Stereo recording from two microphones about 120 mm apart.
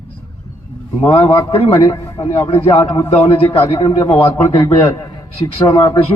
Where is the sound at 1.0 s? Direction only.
50° left (ahead or behind).